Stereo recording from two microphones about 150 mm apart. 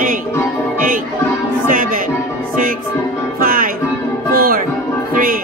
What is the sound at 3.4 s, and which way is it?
Music, 70° right (ahead or behind).